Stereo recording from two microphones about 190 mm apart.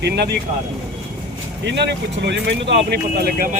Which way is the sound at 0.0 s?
60° right (ahead or behind).